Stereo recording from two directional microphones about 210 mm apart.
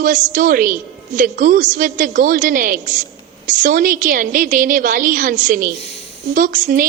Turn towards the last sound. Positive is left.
turn(degrees=-40)  # may be behind; listen again after turning